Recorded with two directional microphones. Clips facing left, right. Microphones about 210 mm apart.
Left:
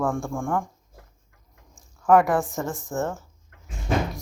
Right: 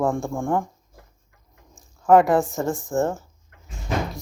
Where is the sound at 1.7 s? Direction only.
25° right (ahead or behind).